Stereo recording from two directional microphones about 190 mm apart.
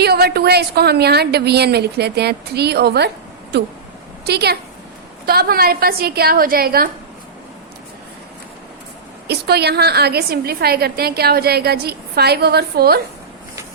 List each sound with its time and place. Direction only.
0.0 s a woman's voice: 55° right (ahead or behind)
4.3 s a woman's voice: 60° right (ahead or behind)
9.2 s a woman's voice: 60° right (ahead or behind)